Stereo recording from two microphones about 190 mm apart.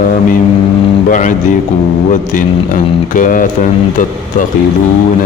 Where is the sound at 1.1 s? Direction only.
45° left (ahead or behind).